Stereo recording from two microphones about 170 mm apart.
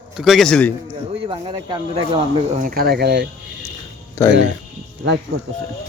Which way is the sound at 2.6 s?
60° right (ahead or behind).